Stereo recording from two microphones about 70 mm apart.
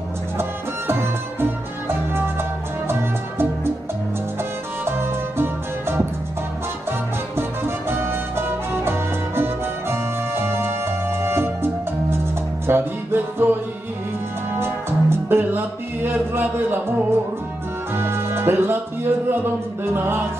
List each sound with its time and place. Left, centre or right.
0.4 s music: right
2.9 s music: right
4.8 s music: right
14.6 s music: right
17.9 s music: right